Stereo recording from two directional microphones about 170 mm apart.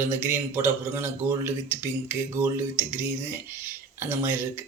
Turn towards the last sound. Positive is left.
turn(degrees=-15)  # may be behind; listen again after turning